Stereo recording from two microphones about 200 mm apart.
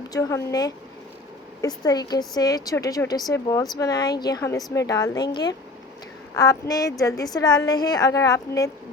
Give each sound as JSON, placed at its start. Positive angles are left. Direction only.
{"t": 0.1, "sound": "a woman's voice", "side_deg": 15}